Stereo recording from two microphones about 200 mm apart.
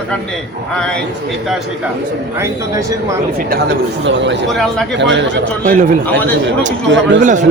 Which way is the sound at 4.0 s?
60° right (ahead or behind).